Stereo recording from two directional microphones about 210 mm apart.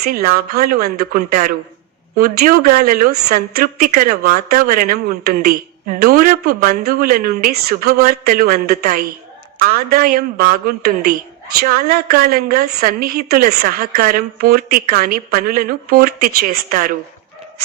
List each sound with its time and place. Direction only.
0.0 s a woman's voice: 45° right (ahead or behind)